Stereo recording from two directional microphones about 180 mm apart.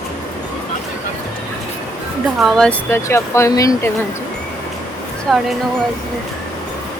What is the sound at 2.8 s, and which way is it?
Speech, 15° left (ahead or behind).